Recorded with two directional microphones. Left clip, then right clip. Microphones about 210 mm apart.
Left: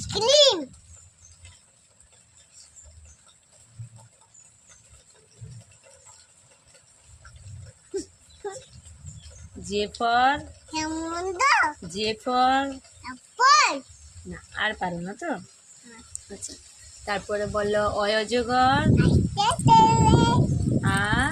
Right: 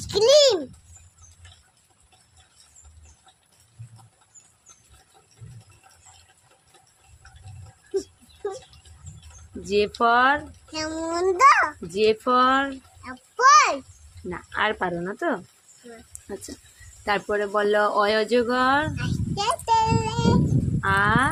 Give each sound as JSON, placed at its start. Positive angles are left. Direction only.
{"t": 0.0, "sound": "a sound", "side_deg": -20}
{"t": 9.6, "sound": "a child's voice", "side_deg": -40}
{"t": 12.0, "sound": "a sound", "side_deg": -35}
{"t": 14.3, "sound": "speech", "side_deg": -35}
{"t": 17.1, "sound": "speech", "side_deg": -35}
{"t": 20.8, "sound": "horse", "side_deg": -30}